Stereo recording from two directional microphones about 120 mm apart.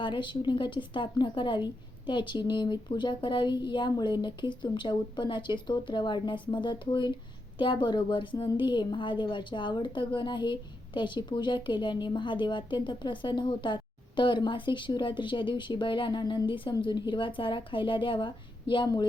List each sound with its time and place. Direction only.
0.0 s a woman's voice: 40° left (ahead or behind)